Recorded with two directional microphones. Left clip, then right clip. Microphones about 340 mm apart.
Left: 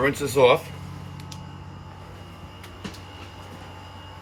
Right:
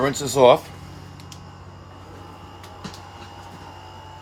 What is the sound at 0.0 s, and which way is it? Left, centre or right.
Speech, right.